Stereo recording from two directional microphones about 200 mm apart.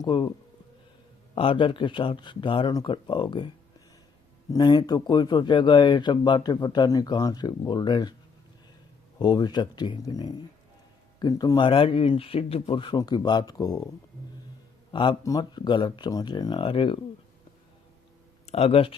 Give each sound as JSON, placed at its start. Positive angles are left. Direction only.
{"t": 0.0, "sound": "speech", "side_deg": 20}
{"t": 1.4, "sound": "speech", "side_deg": 25}
{"t": 4.5, "sound": "speech", "side_deg": 20}
{"t": 9.1, "sound": "speech", "side_deg": 20}
{"t": 14.9, "sound": "speech", "side_deg": 20}
{"t": 18.4, "sound": "speech", "side_deg": 30}